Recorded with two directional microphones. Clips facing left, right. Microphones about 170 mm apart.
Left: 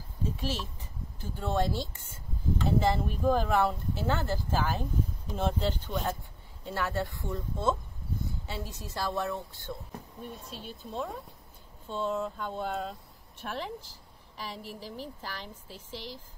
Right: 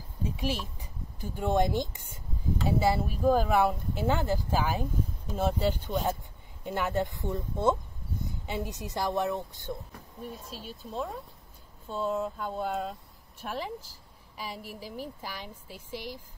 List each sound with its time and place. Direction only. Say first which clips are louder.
0.4 s speech: right 2 dB; 15° right (ahead or behind)
10.2 s speech: right 3 dB; centre (ahead or behind)